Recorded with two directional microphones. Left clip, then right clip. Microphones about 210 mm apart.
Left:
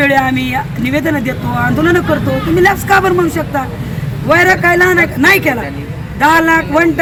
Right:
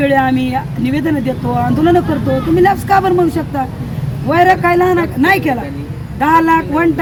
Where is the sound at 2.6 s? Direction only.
15° right (ahead or behind).